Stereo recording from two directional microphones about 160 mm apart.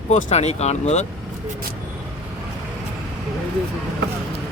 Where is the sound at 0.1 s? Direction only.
50° left (ahead or behind).